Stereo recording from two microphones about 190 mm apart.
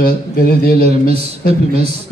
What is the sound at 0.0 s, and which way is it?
A man's voice, 50° left (ahead or behind).